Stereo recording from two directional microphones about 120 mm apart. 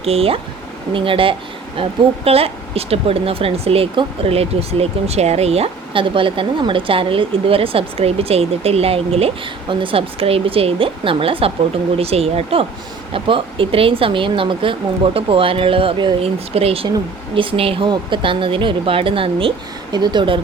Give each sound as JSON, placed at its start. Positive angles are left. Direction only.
{"t": 0.0, "sound": "a woman's voice", "side_deg": -55}